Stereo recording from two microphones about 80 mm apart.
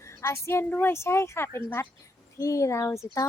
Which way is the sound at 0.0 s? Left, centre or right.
Left.